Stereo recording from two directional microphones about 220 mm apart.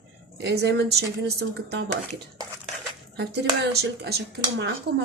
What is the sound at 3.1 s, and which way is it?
A woman's voice, 50° right (ahead or behind).